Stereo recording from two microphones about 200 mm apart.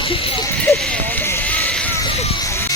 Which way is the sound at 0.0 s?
25° left (ahead or behind).